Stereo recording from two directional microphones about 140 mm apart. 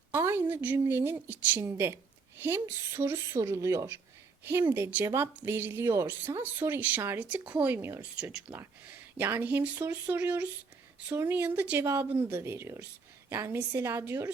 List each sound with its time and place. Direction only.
0.1 s a woman's voice: 15° right (ahead or behind)